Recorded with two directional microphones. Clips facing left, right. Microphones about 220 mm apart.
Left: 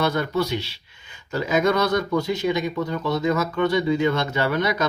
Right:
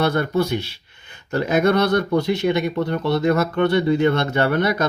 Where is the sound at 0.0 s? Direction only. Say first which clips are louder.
Right 3 dB; 55° right (ahead or behind).